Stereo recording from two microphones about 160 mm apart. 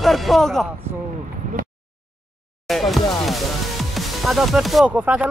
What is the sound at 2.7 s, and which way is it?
Music, centre (ahead or behind).